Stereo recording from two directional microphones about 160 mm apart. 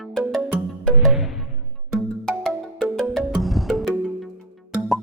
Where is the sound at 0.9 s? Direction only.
5° right (ahead or behind).